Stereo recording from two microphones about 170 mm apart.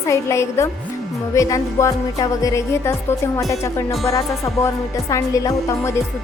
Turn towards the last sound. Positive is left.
turn(degrees=15)  # may be behind; listen again after turning